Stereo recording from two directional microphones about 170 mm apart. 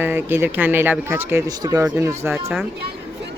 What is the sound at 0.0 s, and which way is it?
Speech, 10° right (ahead or behind).